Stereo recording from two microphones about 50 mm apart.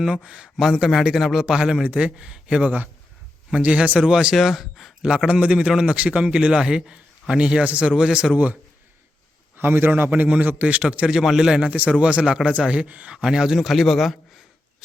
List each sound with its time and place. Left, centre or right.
0.0 s a man's voice: centre
0.5 s a man's voice: centre
1.8 s a man's voice: right
4.1 s a man's voice: centre
5.0 s a man's voice: centre
9.6 s a man's voice: right
9.9 s a man's voice: right
10.9 s a man's voice: right
11.2 s a man's voice: centre; by 13.1 s right
13.2 s a man's voice: centre
13.7 s speech: centre